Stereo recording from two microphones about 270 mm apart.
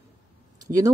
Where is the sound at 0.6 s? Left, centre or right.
Centre.